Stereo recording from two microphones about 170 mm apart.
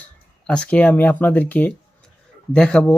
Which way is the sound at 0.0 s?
5° left (ahead or behind).